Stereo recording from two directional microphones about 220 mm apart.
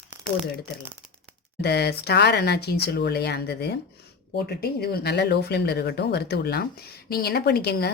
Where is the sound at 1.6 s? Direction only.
45° left (ahead or behind).